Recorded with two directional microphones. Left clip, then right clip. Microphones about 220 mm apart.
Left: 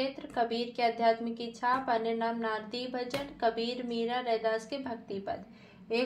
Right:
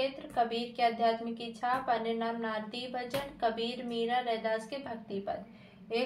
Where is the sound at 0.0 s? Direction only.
45° left (ahead or behind).